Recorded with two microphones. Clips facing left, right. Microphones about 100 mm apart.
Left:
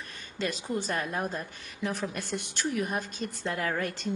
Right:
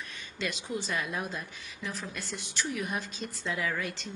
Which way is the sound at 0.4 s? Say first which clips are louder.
Left 3 dB; 45° left (ahead or behind).